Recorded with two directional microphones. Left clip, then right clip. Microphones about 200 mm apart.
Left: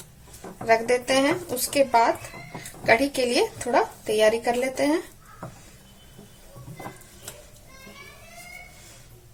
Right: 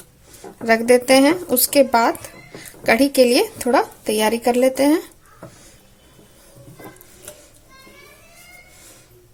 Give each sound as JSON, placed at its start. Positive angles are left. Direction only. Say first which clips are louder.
{"t": 0.6, "sound": "speech", "louder": "right 6 dB", "side_deg": -50}